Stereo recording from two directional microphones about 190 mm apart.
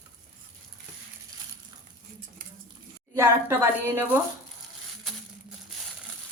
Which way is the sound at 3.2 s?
15° right (ahead or behind).